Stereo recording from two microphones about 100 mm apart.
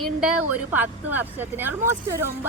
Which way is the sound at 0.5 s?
15° right (ahead or behind).